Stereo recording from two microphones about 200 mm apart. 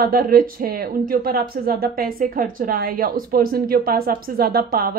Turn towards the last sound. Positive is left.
turn(degrees=-50)  # may be behind; listen again after turning